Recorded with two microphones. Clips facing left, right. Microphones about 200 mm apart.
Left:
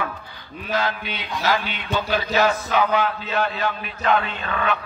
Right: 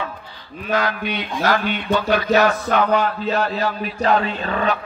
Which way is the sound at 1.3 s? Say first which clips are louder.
Right 3 dB; 55° right (ahead or behind).